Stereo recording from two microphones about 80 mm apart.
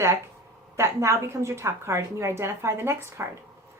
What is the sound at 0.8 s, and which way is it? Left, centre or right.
A woman's voice, right.